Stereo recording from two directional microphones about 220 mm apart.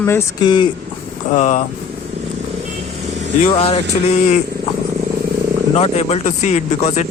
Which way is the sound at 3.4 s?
25° left (ahead or behind).